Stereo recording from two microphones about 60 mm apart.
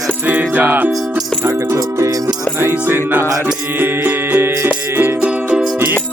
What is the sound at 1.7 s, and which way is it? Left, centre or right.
Music, right.